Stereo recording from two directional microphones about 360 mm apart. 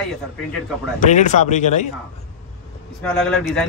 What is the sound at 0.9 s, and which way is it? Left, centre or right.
Speech, centre.